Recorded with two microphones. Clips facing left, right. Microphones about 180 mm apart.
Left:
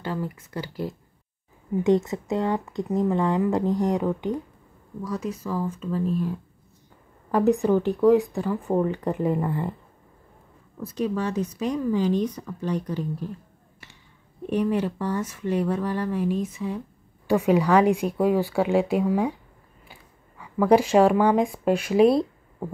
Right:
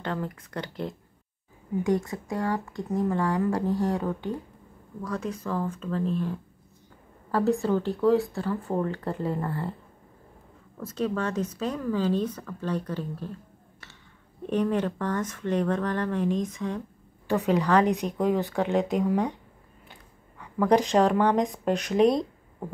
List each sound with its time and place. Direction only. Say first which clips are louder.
0.0 s speech: left 2 dB; 5° left (ahead or behind)
1.8 s speech: left 5 dB; 25° left (ahead or behind)
10.8 s speech: left 2 dB; 10° left (ahead or behind)
14.4 s speech: left 2 dB; 10° left (ahead or behind)